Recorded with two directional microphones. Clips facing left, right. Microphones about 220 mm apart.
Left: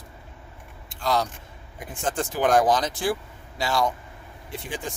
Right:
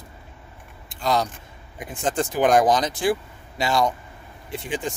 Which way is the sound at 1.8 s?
20° right (ahead or behind).